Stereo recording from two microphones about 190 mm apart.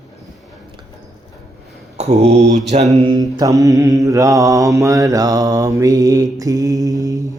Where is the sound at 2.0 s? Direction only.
35° right (ahead or behind).